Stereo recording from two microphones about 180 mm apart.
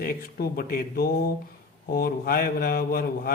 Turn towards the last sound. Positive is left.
turn(degrees=55)  # may be behind; listen again after turning